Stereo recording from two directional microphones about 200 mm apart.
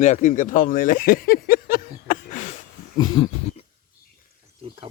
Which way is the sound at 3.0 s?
25° left (ahead or behind).